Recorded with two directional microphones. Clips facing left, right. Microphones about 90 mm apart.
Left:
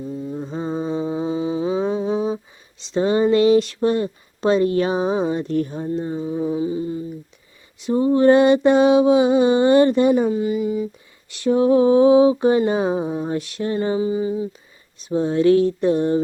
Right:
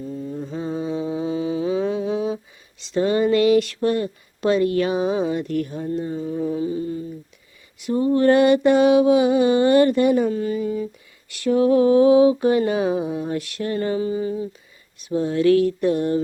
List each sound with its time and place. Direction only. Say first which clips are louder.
0.0 s mantra: left 2 dB; 15° left (ahead or behind)
0.3 s mantra: left 2 dB; 25° left (ahead or behind)
2.8 s speech: left 1 dB; 25° left (ahead or behind)